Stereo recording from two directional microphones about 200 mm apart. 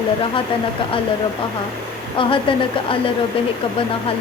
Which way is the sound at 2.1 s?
25° left (ahead or behind).